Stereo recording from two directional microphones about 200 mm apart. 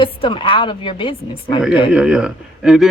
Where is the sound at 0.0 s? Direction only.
25° left (ahead or behind).